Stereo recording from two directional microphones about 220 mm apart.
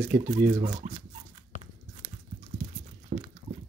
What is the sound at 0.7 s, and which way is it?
Rodents, 25° right (ahead or behind).